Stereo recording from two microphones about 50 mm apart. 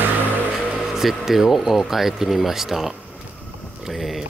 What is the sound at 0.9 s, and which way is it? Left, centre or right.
Speech, centre.